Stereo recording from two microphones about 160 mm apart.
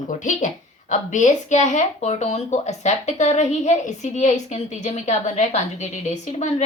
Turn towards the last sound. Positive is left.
turn(degrees=45)  # may be behind; listen again after turning